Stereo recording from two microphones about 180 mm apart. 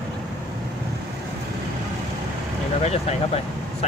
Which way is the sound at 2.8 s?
35° left (ahead or behind).